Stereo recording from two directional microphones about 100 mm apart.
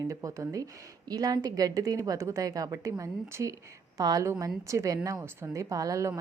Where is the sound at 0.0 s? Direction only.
30° right (ahead or behind).